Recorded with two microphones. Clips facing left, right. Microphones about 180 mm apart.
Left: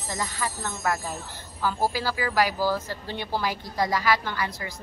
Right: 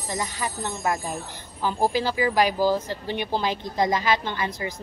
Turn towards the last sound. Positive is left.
turn(degrees=-20)  # may be behind; listen again after turning